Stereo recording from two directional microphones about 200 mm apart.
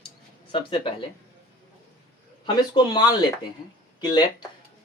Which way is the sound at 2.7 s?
20° left (ahead or behind).